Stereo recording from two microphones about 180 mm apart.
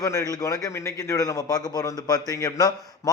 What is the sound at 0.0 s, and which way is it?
A man's voice, 20° left (ahead or behind).